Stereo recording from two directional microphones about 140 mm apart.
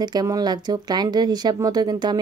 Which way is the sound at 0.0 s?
30° right (ahead or behind).